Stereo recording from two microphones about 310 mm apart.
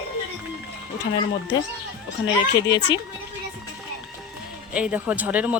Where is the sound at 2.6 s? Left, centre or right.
Centre.